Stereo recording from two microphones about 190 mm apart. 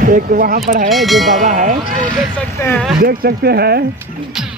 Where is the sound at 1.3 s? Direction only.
40° right (ahead or behind).